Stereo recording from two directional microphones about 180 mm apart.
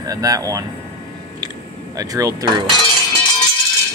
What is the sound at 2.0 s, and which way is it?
Speech, 20° right (ahead or behind).